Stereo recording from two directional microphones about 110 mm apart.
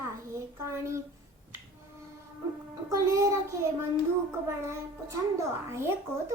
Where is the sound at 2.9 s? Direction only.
30° right (ahead or behind).